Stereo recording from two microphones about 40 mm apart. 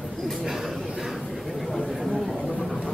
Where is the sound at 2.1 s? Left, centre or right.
Centre.